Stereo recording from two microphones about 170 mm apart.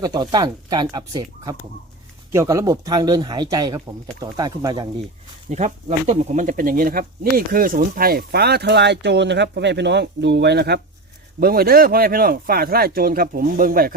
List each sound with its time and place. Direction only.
0.0 s speech: 25° right (ahead or behind)
5.5 s speech: 45° right (ahead or behind); by 10.8 s 75° right (ahead or behind)
11.3 s a man's voice: 60° right (ahead or behind)